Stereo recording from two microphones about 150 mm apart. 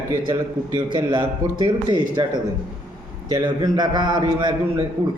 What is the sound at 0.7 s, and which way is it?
Speech, 30° right (ahead or behind).